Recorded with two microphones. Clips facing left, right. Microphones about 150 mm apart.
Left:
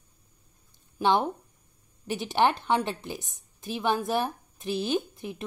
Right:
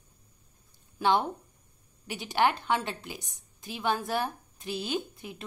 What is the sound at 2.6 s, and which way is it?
A woman's voice, 20° left (ahead or behind).